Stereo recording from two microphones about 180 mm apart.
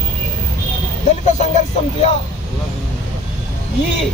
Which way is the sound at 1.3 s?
40° left (ahead or behind).